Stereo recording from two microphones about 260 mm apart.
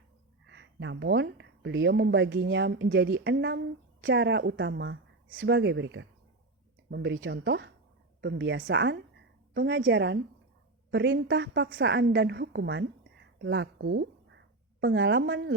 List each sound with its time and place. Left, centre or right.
0.4 s a woman's voice: right